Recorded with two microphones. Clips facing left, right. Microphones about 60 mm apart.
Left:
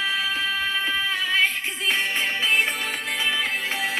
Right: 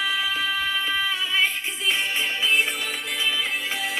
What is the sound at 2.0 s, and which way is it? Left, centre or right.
Music, left.